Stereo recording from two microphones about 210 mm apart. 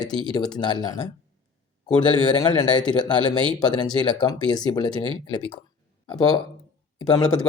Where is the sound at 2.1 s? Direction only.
20° left (ahead or behind).